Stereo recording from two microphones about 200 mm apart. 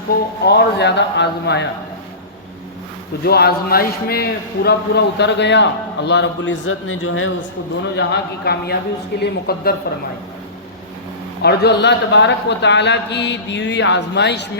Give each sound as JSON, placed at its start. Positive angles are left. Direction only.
{"t": 0.4, "sound": "a man's voice", "side_deg": 55}
{"t": 3.2, "sound": "a man's voice", "side_deg": 50}
{"t": 7.9, "sound": "speech", "side_deg": 55}
{"t": 11.4, "sound": "a man's voice", "side_deg": 55}